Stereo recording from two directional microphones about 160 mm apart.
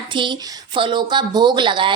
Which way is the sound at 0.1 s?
30° right (ahead or behind).